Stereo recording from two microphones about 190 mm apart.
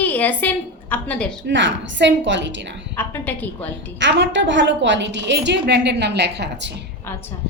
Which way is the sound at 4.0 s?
70° right (ahead or behind).